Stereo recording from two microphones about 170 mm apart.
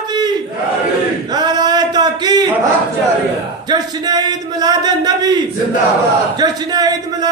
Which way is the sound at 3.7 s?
25° right (ahead or behind).